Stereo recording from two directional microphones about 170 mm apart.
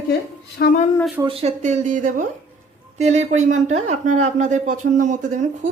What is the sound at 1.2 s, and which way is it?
Speech, 35° right (ahead or behind).